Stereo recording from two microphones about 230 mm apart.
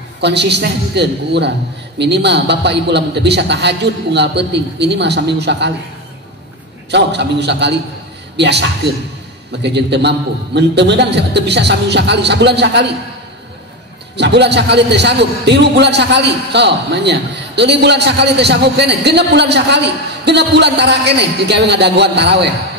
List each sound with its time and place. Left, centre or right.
0.2 s a man's voice: right
6.9 s a man's voice: right
14.1 s a man's voice: right